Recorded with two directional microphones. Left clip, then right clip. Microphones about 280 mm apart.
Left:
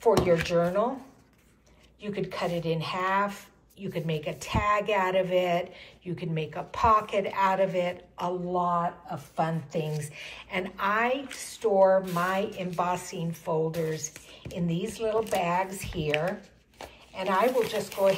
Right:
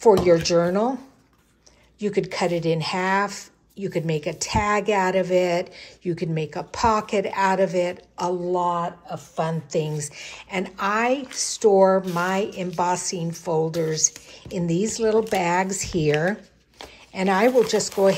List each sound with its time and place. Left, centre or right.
0.0 s a woman's voice: right
2.0 s a woman's voice: right
9.1 s a woman's voice: right
17.1 s a woman's voice: right